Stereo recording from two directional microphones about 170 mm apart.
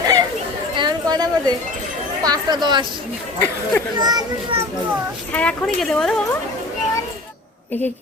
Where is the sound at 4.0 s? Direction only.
25° right (ahead or behind).